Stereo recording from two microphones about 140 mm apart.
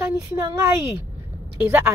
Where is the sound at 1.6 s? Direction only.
15° right (ahead or behind).